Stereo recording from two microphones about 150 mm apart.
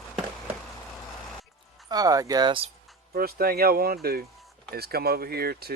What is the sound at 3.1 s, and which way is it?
Speech, 80° right.